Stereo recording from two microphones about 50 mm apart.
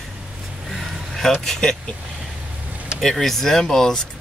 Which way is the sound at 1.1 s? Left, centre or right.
Centre.